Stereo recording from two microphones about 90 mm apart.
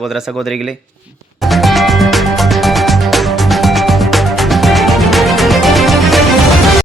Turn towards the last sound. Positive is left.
turn(degrees=0)  # may be behind; listen again after turning